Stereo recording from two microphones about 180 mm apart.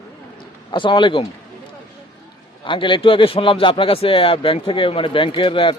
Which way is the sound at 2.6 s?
25° left (ahead or behind).